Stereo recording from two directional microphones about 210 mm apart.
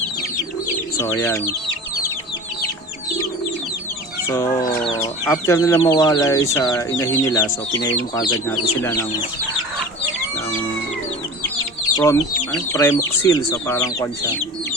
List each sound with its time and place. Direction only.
0.9 s speech: 10° left (ahead or behind)
4.3 s speech: 15° left (ahead or behind)
11.9 s speech: 15° left (ahead or behind)